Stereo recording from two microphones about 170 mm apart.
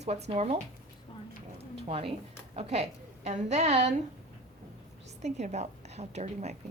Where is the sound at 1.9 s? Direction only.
35° right (ahead or behind).